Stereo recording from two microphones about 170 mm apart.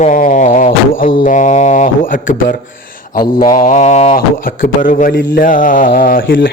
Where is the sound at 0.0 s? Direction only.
50° left (ahead or behind).